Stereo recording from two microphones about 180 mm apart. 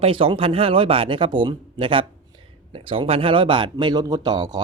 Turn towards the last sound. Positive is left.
turn(degrees=-20)  # may be behind; listen again after turning